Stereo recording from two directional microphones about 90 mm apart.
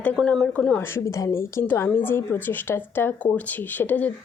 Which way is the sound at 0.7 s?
25° left (ahead or behind).